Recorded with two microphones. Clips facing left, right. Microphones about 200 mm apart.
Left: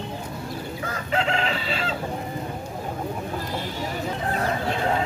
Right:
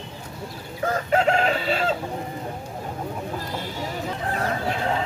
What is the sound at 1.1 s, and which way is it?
Chicken, 45° right (ahead or behind).